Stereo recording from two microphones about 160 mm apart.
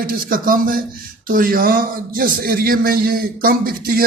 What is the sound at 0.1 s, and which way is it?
A man's voice, 60° right (ahead or behind).